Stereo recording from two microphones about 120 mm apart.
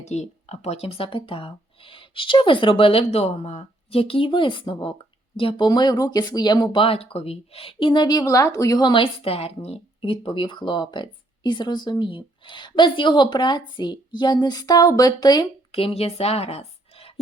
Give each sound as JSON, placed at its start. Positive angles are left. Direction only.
{"t": 0.1, "sound": "speech", "side_deg": 65}
{"t": 8.9, "sound": "speech", "side_deg": 50}
{"t": 15.7, "sound": "speech", "side_deg": 50}